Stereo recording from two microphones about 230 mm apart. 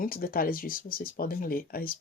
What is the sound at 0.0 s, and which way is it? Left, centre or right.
Speech, left.